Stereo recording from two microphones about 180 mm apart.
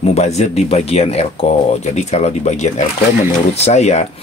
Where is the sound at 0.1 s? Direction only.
35° left (ahead or behind).